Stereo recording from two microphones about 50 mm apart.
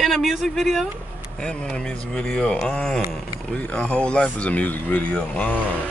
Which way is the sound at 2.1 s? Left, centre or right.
Centre.